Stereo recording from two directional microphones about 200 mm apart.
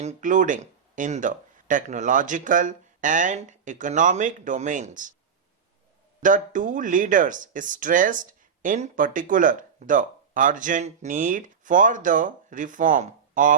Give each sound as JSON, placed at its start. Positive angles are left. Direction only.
{"t": 0.0, "sound": "speech", "side_deg": -35}
{"t": 6.2, "sound": "speech", "side_deg": -40}